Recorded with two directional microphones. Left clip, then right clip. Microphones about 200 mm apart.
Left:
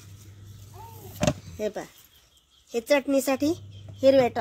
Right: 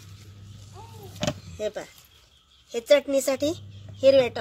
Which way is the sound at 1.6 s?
35° left (ahead or behind).